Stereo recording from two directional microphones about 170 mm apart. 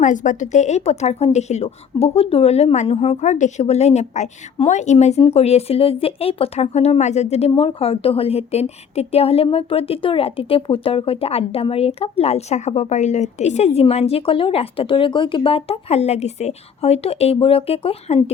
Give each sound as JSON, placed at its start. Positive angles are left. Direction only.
{"t": 0.0, "sound": "speech", "side_deg": 50}